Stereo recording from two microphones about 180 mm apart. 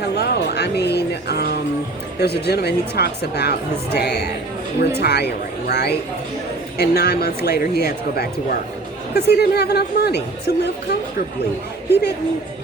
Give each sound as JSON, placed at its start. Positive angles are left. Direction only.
{"t": 0.0, "sound": "speech", "side_deg": 65}